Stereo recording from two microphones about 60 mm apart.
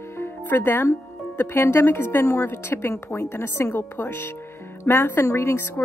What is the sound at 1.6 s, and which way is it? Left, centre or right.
A woman's voice, left.